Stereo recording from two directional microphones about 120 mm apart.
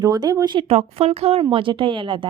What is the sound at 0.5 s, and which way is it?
A woman's voice, 55° right (ahead or behind).